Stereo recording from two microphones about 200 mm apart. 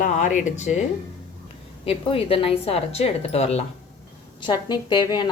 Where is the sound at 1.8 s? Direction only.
25° left (ahead or behind).